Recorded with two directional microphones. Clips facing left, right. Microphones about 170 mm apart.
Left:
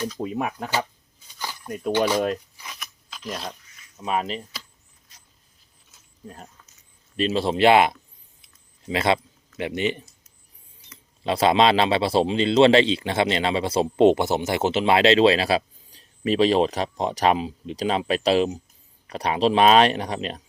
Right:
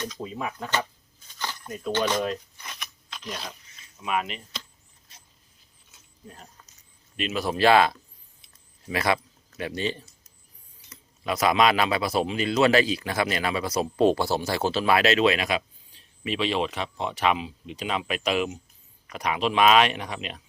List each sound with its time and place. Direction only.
0.2 s speech: 65° left (ahead or behind)
1.4 s a sound: 10° left (ahead or behind)
1.9 s speech: 10° left (ahead or behind)
2.6 s a sound: 5° left (ahead or behind)
4.0 s speech: 35° left (ahead or behind)
7.2 s a man's voice: 30° left (ahead or behind)
11.2 s a man's voice: 25° left (ahead or behind)